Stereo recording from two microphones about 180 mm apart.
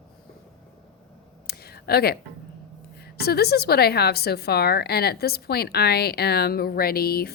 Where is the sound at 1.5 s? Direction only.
60° left (ahead or behind).